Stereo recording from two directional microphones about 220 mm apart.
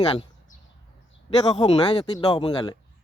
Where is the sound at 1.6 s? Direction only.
20° left (ahead or behind).